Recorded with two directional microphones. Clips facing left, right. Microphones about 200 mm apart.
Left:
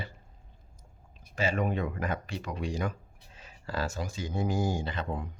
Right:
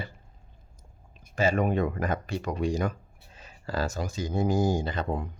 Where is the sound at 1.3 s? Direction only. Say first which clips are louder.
Right 5 dB; 45° right (ahead or behind).